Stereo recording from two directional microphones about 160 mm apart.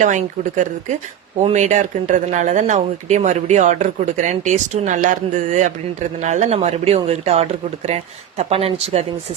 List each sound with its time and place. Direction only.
0.0 s speech: 50° right (ahead or behind)